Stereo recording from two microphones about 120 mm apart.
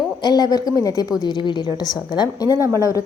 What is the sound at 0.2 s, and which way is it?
A woman's voice, 35° left (ahead or behind).